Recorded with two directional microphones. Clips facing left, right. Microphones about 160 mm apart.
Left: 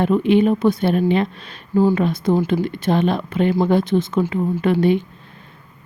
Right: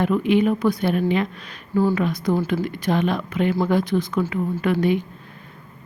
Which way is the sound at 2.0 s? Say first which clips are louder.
Left 3 dB; 30° left (ahead or behind).